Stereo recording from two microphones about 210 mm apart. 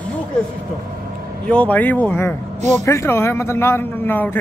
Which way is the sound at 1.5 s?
5° left (ahead or behind).